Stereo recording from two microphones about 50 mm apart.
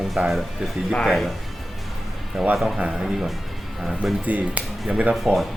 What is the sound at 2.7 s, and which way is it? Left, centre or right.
Speech, centre.